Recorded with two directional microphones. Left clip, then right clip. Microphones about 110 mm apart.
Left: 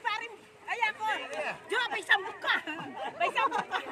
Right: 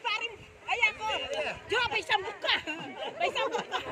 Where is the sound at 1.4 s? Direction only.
30° left (ahead or behind).